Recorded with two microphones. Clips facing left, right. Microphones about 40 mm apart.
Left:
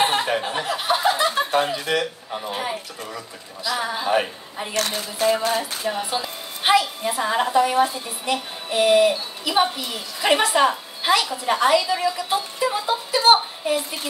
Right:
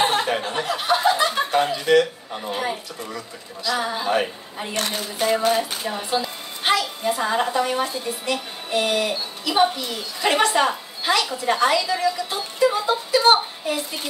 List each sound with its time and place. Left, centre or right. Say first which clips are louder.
0.0 s chuckle: even; centre
1.5 s a man's voice: right 3 dB; centre
4.7 s speech: left 1 dB; right
5.9 s a woman's voice: right 1 dB; centre